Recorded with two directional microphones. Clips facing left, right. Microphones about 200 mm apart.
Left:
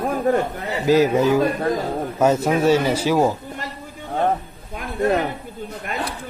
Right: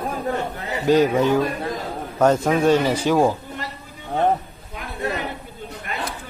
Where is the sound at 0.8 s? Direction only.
5° left (ahead or behind).